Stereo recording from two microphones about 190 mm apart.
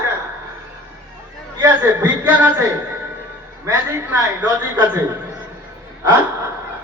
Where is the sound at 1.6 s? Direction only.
15° right (ahead or behind).